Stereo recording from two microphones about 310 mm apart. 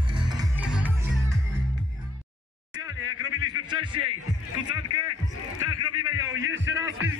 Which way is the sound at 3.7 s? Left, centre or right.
Centre.